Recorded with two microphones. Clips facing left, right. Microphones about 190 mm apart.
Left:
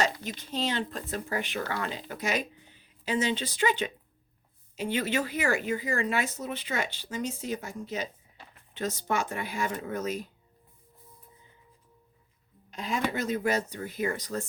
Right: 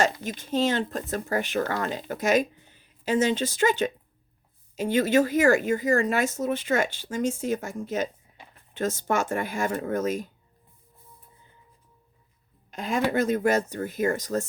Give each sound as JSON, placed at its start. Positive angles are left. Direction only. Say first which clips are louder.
{"t": 0.0, "sound": "speech", "louder": "right 4 dB", "side_deg": -50}
{"t": 12.7, "sound": "a woman's voice", "louder": "right 6 dB", "side_deg": -50}